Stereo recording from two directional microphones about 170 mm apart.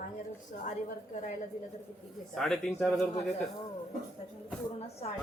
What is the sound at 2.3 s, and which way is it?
Speech, centre (ahead or behind).